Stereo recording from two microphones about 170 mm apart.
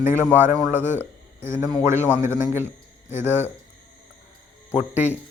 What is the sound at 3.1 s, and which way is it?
Speech, 15° right (ahead or behind).